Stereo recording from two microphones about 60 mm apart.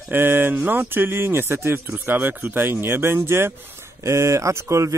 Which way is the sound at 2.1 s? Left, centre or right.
Right.